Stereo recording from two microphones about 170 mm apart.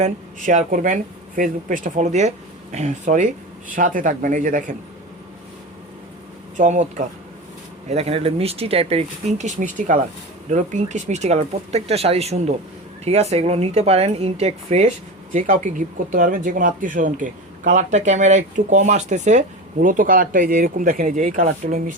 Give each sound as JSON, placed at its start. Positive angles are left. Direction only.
{"t": 0.0, "sound": "speech", "side_deg": -45}
{"t": 6.6, "sound": "speech", "side_deg": -45}